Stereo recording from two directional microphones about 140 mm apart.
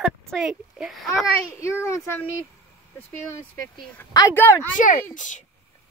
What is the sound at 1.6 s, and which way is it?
Speech, 20° left (ahead or behind).